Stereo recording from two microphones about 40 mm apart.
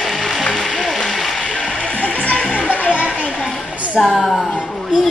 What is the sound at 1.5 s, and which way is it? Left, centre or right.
Music, centre.